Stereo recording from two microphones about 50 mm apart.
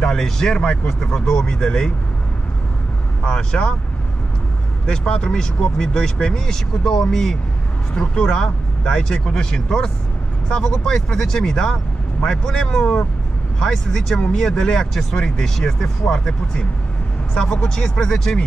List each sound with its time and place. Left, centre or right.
0.0 s speech: centre
3.3 s speech: left
4.8 s speech: centre
17.3 s speech: centre